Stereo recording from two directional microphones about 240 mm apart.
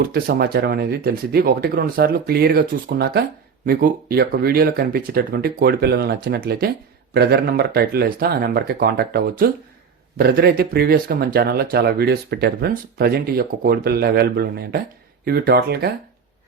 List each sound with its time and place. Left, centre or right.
0.0 s speech: right